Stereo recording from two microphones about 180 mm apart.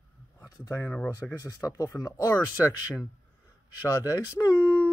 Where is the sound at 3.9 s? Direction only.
20° left (ahead or behind).